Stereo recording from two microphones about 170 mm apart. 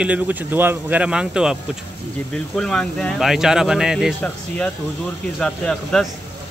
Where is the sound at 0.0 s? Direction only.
10° right (ahead or behind).